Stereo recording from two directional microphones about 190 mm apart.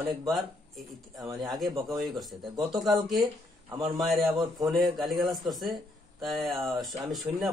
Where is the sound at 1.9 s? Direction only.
Centre (ahead or behind).